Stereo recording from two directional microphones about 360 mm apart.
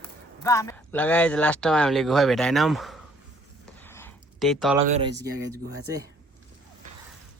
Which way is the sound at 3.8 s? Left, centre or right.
Centre.